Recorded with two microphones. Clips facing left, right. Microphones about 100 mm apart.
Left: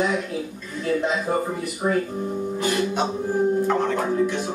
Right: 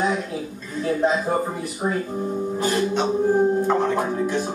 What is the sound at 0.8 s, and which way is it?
Music, 35° right (ahead or behind).